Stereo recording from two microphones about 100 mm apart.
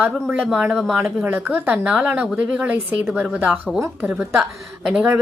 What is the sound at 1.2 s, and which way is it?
A woman's voice, 15° right (ahead or behind).